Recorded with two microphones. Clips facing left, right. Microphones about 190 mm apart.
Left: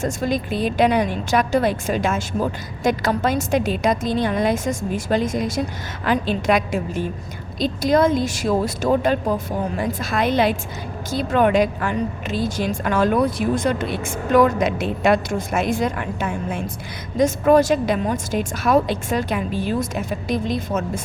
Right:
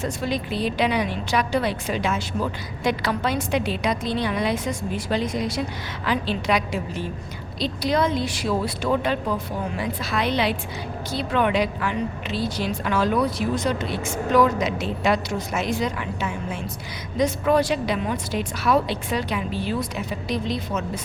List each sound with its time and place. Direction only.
0.0 s a woman's voice: 45° left (ahead or behind)